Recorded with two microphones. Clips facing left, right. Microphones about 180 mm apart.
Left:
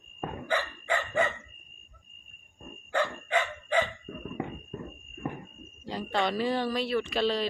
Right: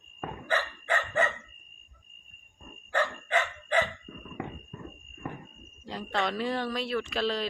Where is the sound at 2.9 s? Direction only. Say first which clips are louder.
Even; 10° left (ahead or behind).